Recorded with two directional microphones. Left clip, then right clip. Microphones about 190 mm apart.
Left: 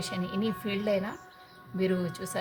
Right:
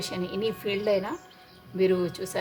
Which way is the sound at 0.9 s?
35° right (ahead or behind).